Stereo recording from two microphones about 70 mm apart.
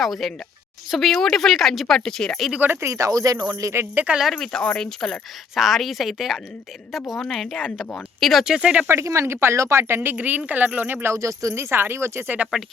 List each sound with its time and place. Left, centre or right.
0.0 s speech: centre
2.8 s speech: right
3.5 s speech: right
3.9 s speech: centre
4.2 s speech: centre
5.5 s speech: centre
8.4 s speech: centre
8.9 s speech: right
11.1 s speech: right